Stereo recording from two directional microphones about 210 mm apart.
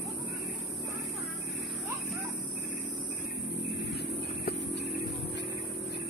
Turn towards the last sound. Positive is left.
turn(degrees=50)  # may be behind; listen again after turning